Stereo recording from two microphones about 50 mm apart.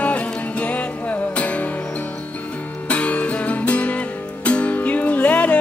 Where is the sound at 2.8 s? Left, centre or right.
Left.